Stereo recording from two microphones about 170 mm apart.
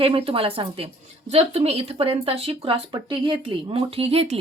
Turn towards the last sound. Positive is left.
turn(degrees=-35)  # may be behind; listen again after turning